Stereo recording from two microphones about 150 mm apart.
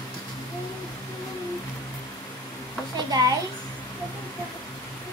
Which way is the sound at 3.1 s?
25° right (ahead or behind).